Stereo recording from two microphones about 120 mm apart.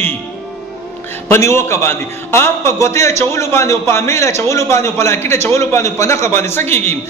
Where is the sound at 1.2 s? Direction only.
20° left (ahead or behind).